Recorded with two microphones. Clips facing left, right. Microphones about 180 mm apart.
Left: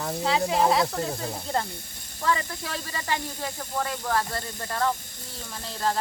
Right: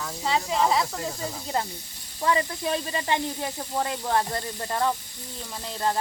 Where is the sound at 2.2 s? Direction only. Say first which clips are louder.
Right 3 dB; 20° right (ahead or behind).